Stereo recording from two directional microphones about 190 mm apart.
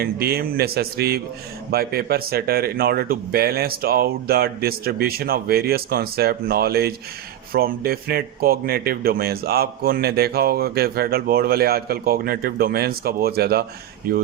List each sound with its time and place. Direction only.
0.0 s speech: 55° right (ahead or behind)